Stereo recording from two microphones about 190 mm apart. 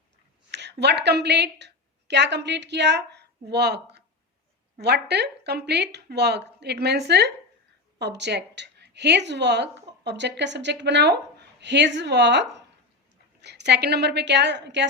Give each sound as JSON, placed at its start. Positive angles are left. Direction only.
{"t": 0.5, "sound": "a woman's voice", "side_deg": -65}